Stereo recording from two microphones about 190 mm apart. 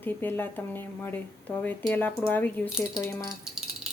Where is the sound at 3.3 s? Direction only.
Centre (ahead or behind).